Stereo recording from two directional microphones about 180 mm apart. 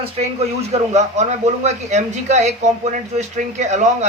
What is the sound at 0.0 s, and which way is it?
Speech, 35° right (ahead or behind).